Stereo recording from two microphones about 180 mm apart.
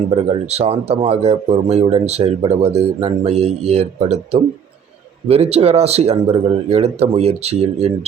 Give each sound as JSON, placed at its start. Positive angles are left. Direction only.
{"t": 0.4, "sound": "speech", "side_deg": -35}